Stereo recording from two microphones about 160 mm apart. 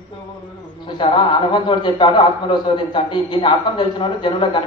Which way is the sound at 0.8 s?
30° left (ahead or behind).